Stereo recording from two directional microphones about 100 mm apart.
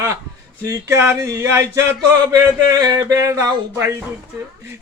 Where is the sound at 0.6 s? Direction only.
30° right (ahead or behind).